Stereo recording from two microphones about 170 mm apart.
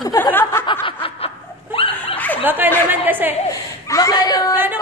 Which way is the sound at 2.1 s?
10° left (ahead or behind).